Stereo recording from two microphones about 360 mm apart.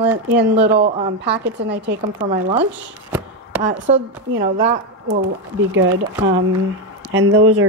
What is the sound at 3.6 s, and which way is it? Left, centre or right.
Speech, right.